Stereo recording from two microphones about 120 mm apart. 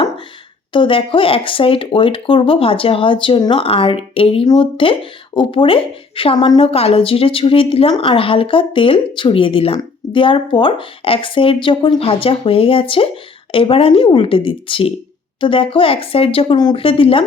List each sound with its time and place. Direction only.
0.7 s speech: 45° left (ahead or behind)